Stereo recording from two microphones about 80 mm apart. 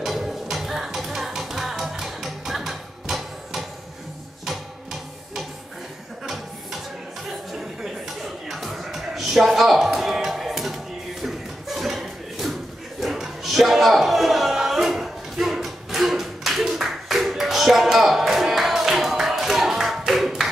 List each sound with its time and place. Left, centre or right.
0.0 s music: centre
7.2 s chuckle: centre
13.0 s a sound: centre